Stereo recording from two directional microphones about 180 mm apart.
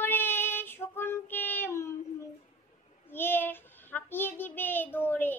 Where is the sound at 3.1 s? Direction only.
10° left (ahead or behind).